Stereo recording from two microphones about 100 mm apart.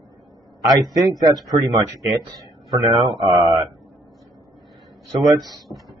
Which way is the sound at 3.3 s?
45° right (ahead or behind).